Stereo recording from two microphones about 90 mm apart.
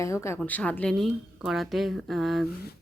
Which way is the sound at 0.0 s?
35° left (ahead or behind).